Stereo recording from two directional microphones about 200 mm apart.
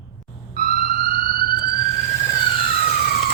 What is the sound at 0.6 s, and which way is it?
Siren, 50° right (ahead or behind).